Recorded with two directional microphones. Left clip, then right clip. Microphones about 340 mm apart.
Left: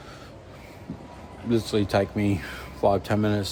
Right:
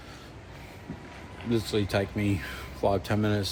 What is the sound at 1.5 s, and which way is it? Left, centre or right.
Speech, centre.